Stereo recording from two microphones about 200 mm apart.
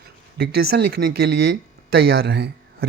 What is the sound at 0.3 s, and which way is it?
Speech, 55° right (ahead or behind).